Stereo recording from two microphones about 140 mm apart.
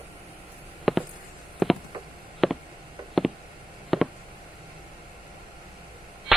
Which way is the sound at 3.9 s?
Centre (ahead or behind).